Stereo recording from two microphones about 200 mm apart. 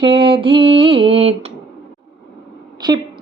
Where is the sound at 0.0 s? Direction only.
25° right (ahead or behind).